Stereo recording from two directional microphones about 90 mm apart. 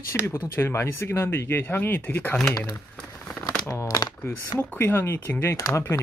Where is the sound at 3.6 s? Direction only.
40° left (ahead or behind).